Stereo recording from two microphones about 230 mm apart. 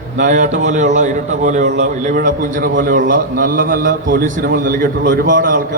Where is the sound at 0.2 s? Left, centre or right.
Right.